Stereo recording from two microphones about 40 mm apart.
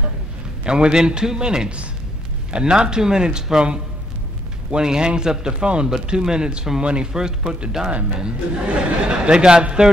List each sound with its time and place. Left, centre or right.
0.7 s a man's voice: right
7.1 s a man's voice: centre